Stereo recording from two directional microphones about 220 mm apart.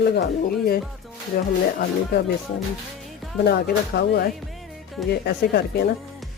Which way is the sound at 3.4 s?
50° left (ahead or behind).